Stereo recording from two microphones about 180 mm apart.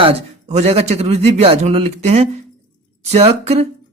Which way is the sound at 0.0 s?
35° right (ahead or behind).